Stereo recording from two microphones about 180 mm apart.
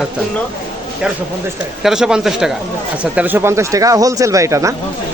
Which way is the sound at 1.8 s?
5° right (ahead or behind).